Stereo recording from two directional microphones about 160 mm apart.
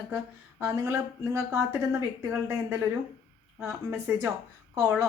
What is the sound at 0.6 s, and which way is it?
A woman's voice, 20° right (ahead or behind).